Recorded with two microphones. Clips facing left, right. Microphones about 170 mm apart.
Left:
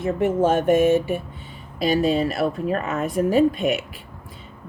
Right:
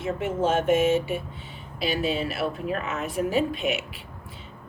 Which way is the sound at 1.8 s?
40° left (ahead or behind).